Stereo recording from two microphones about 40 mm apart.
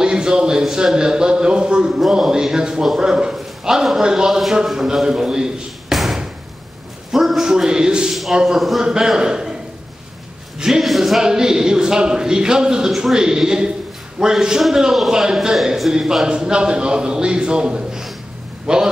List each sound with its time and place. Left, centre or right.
0.0 s a man's voice: centre
1.9 s a sound: centre
2.3 s a man's voice: centre
3.0 s a sound: centre
4.0 s a man's voice: centre
4.3 s speech: centre
5.9 s slam: centre
7.1 s a sound: centre
8.1 s a sound: centre
8.5 s speech: centre
8.8 s speech: centre
10.6 s a man's voice: centre